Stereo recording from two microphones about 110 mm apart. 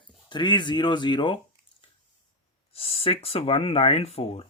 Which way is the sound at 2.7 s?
60° left (ahead or behind).